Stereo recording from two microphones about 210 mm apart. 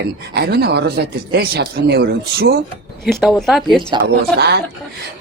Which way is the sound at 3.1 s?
Centre (ahead or behind).